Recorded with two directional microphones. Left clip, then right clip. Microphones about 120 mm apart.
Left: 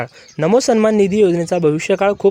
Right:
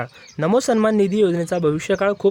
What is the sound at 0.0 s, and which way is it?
Speech, 25° left (ahead or behind).